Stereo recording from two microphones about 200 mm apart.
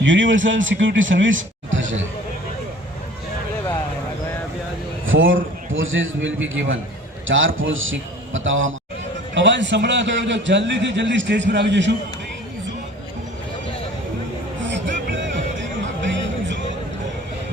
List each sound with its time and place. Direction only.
0.0 s a man's voice: 70° right (ahead or behind)
5.0 s a man's voice: 75° right (ahead or behind)
9.3 s a man's voice: 65° right (ahead or behind)
14.6 s music: 65° right (ahead or behind)